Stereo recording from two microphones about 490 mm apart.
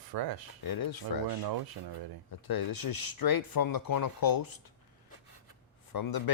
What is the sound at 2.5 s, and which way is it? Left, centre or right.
Speech, left.